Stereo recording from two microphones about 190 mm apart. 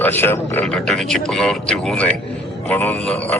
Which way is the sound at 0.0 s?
10° left (ahead or behind).